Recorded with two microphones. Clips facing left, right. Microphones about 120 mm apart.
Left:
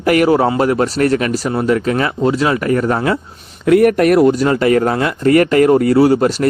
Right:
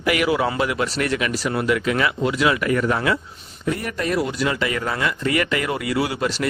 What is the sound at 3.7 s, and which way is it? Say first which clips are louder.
Speech: left 14 dB; 70° left (ahead or behind).